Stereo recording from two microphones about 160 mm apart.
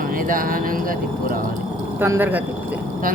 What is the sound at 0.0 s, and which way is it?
Speech, 60° right (ahead or behind).